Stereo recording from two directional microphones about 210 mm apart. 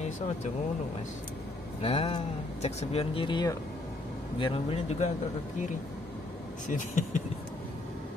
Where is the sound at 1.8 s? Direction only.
25° left (ahead or behind).